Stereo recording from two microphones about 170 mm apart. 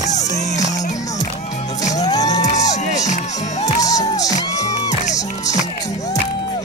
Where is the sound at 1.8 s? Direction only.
20° left (ahead or behind).